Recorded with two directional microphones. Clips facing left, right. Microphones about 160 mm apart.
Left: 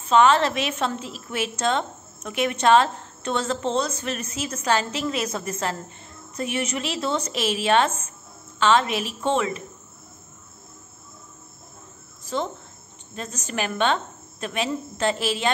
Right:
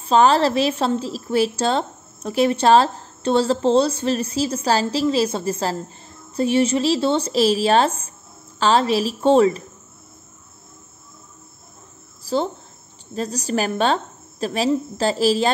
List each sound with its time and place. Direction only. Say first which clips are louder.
0.0 s a woman's voice: right 2 dB; 35° right (ahead or behind)
12.3 s a sound: right 6 dB; 35° right (ahead or behind)
13.1 s a woman's voice: right 8 dB; 35° right (ahead or behind)